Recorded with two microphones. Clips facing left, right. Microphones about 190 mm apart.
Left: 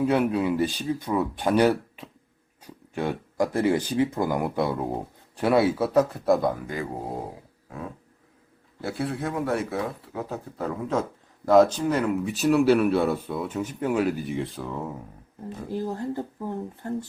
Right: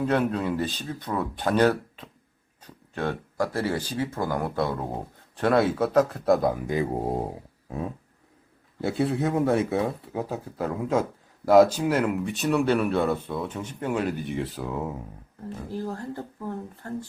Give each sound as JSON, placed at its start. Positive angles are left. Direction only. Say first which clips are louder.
{"t": 0.0, "sound": "speech", "louder": "left 2 dB", "side_deg": 10}
{"t": 6.7, "sound": "speech", "louder": "right 5 dB", "side_deg": -25}
{"t": 8.8, "sound": "speech", "louder": "right 4 dB", "side_deg": -20}
{"t": 10.2, "sound": "a man's voice", "louder": "right 1 dB", "side_deg": -10}
{"t": 15.4, "sound": "speech", "louder": "left 2 dB", "side_deg": 15}